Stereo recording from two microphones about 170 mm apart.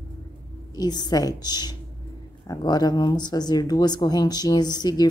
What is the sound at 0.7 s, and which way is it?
Speech, 25° left (ahead or behind).